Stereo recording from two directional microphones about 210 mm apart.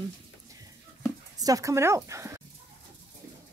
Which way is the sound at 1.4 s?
15° right (ahead or behind).